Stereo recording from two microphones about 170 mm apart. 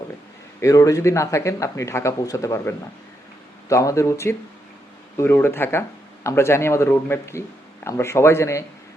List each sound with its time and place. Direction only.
0.6 s speech: 20° left (ahead or behind)